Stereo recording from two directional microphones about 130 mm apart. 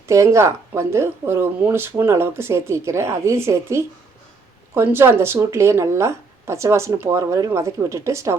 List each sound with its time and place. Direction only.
0.1 s speech: 25° right (ahead or behind)